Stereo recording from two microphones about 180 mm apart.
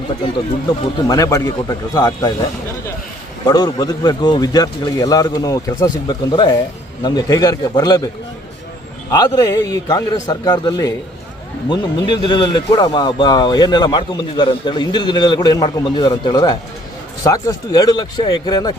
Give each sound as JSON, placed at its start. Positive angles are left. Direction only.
{"t": 1.0, "sound": "speech", "side_deg": 20}
{"t": 3.4, "sound": "speech", "side_deg": 20}